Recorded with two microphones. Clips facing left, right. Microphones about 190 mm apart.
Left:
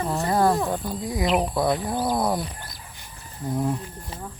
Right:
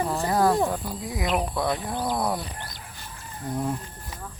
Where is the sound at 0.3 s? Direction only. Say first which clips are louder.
Even; centre (ahead or behind).